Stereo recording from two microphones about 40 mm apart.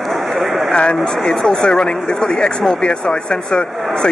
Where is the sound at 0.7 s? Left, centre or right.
Left.